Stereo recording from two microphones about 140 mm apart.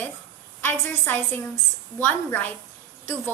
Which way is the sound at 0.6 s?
15° left (ahead or behind).